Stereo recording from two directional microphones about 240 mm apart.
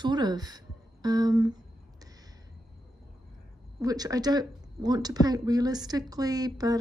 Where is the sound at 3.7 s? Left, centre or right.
Centre.